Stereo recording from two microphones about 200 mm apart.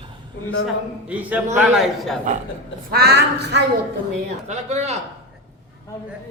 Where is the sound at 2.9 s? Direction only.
55° right (ahead or behind).